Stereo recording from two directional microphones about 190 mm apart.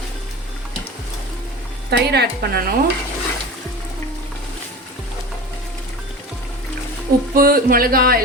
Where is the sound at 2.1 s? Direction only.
55° right (ahead or behind).